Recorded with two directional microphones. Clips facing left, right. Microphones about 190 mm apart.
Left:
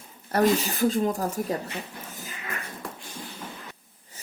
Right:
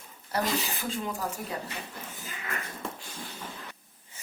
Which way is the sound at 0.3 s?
40° left (ahead or behind).